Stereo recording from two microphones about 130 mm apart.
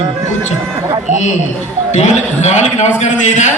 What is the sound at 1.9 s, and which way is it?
A man's voice, 60° left (ahead or behind).